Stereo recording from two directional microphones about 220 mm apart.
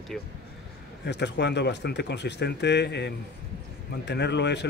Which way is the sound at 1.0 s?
50° left (ahead or behind).